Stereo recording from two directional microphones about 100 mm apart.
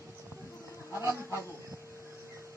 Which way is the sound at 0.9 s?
30° right (ahead or behind).